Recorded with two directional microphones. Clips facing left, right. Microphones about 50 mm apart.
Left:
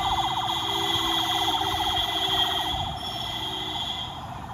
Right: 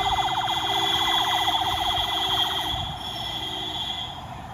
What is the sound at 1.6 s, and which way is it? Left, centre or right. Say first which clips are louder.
Siren: right 1 dB; centre.